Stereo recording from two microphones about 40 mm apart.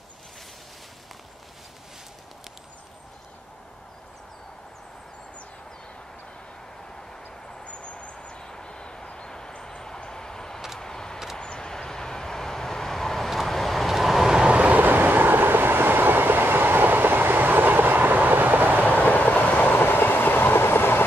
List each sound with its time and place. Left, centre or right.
7.6 s vehicle: left; by 14.5 s centre
14.5 s vehicle: right
14.8 s train: right
18.9 s train: left
19.7 s train: left